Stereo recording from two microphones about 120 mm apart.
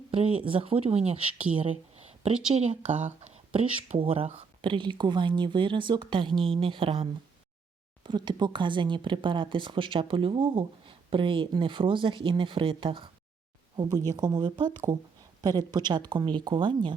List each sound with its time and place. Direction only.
0.1 s speech: 50° right (ahead or behind)
2.2 s speech: 70° right (ahead or behind)
3.8 s speech: 55° right (ahead or behind)
13.7 s speech: 30° right (ahead or behind)